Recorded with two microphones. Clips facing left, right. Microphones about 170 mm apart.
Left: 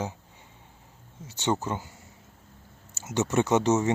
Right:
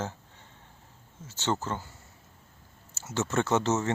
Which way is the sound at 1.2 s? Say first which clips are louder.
Left 3 dB; 15° left (ahead or behind).